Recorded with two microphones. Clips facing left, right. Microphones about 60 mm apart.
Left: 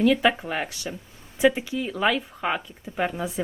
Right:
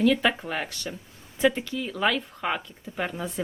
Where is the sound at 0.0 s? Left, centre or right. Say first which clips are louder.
Left 2 dB; centre.